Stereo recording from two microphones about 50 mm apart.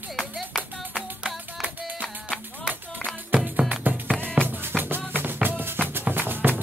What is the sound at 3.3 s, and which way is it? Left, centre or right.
Music, right.